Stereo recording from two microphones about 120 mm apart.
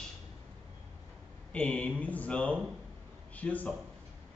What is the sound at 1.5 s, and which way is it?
Speech, 10° left (ahead or behind).